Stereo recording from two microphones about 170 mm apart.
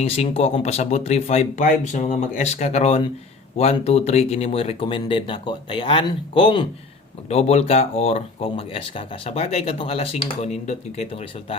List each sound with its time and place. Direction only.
0.0 s speech: 40° left (ahead or behind)